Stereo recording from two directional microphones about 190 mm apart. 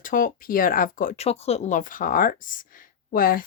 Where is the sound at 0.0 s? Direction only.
45° left (ahead or behind).